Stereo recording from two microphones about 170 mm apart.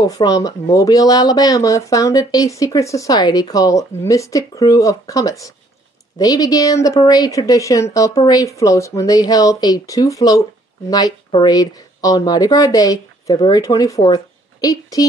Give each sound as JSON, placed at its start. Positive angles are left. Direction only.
{"t": 0.0, "sound": "speech", "side_deg": 20}